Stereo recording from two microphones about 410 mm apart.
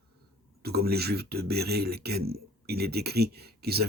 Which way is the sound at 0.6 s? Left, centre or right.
Right.